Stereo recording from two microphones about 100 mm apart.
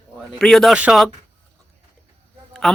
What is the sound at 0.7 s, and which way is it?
Speech, 10° right (ahead or behind).